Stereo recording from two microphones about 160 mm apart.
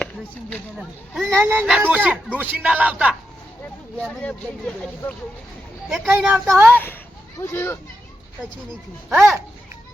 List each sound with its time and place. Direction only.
0.8 s speech: centre (ahead or behind)
1.4 s speech: 15° right (ahead or behind)
1.6 s speech: 5° right (ahead or behind)
4.0 s speech: 10° left (ahead or behind)
5.9 s speech: 10° right (ahead or behind)
6.7 s speech: 10° left (ahead or behind)
9.0 s speech: centre (ahead or behind)